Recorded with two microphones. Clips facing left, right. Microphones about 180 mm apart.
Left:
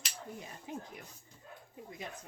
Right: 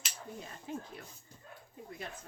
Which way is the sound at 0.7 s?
15° left (ahead or behind).